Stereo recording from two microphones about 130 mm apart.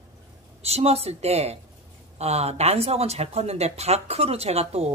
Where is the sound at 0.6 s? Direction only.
50° right (ahead or behind).